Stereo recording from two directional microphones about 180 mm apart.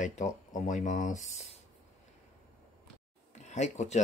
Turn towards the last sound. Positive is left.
turn(degrees=40)  # may be behind; listen again after turning